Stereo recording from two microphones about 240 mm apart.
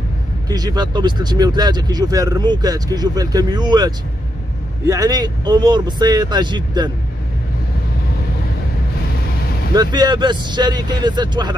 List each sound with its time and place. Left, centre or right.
0.5 s speech: centre
9.8 s speech: centre